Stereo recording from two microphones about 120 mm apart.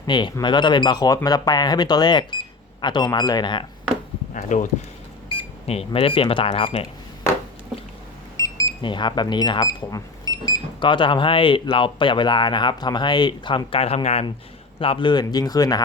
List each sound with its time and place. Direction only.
0.0 s speech: 40° left (ahead or behind)
4.4 s speech: 90° left
5.3 s speech: 50° left (ahead or behind)
8.4 s a sound: 25° left (ahead or behind)
8.8 s speech: 40° left (ahead or behind); by 14.3 s 60° left (ahead or behind)
14.8 s speech: 45° left (ahead or behind)